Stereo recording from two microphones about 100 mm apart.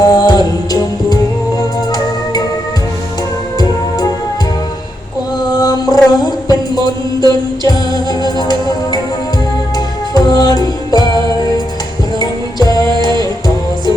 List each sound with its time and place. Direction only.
0.0 s music: 40° left (ahead or behind)
3.6 s music: 40° left (ahead or behind)
5.5 s music: 40° left (ahead or behind)